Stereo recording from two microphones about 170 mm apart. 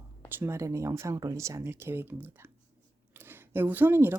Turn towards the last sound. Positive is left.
turn(degrees=-15)  # may be behind; listen again after turning